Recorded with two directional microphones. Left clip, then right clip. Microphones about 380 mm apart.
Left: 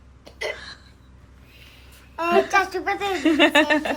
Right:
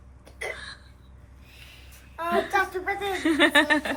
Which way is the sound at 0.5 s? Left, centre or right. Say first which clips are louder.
Left 2 dB; centre.